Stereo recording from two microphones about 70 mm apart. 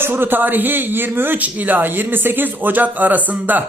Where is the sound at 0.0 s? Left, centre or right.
Right.